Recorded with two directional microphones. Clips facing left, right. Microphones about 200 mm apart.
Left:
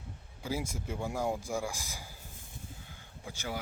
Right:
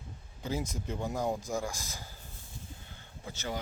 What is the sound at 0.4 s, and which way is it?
A man's voice, 10° left (ahead or behind).